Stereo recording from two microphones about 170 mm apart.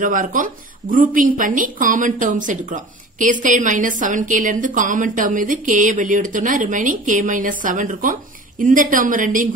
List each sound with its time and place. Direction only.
0.0 s a woman's voice: 50° right (ahead or behind)